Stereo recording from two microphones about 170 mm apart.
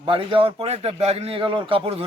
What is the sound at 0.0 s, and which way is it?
A man's voice, 30° right (ahead or behind).